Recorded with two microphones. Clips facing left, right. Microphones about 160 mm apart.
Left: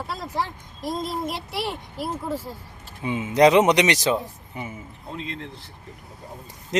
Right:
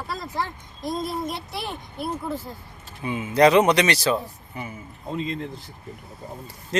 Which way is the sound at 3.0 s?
20° left (ahead or behind).